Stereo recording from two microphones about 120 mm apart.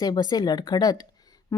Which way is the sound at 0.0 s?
35° left (ahead or behind).